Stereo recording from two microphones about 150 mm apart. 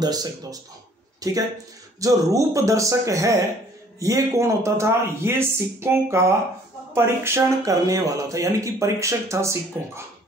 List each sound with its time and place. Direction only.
0.0 s speech: 25° right (ahead or behind)